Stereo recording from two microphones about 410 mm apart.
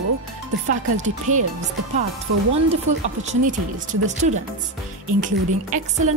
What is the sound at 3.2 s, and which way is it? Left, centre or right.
A woman's voice, centre.